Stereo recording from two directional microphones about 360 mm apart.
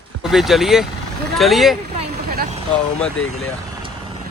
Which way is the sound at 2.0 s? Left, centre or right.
Right.